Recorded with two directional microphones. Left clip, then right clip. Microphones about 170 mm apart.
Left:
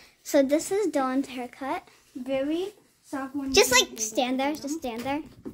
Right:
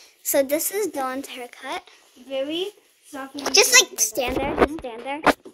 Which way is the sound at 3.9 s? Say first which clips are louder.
Right 3 dB; 30° right (ahead or behind).